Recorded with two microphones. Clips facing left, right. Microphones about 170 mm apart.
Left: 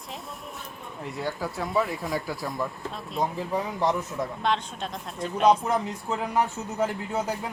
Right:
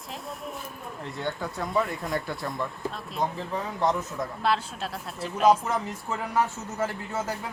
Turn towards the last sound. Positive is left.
turn(degrees=15)  # may be behind; listen again after turning